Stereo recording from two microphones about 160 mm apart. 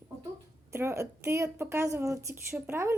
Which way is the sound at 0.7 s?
15° right (ahead or behind).